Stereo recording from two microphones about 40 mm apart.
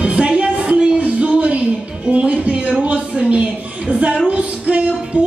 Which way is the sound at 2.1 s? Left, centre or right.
Right.